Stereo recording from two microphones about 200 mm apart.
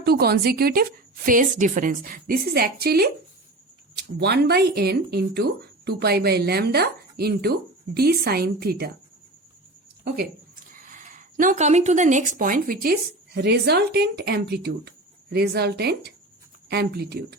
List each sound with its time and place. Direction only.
0.0 s speech: 50° right (ahead or behind)
10.0 s speech: 50° right (ahead or behind)